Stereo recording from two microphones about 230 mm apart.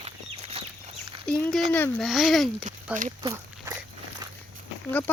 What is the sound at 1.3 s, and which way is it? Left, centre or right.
Speech, centre.